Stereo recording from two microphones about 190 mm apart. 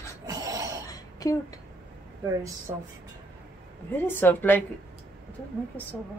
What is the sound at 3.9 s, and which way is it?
Speech, 10° left (ahead or behind).